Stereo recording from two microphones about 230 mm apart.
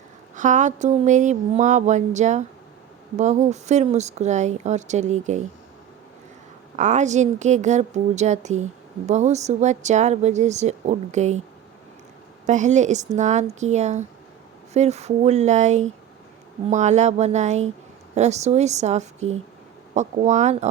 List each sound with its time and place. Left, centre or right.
0.3 s a woman's voice: right
6.7 s a woman's voice: right
12.5 s a woman's voice: right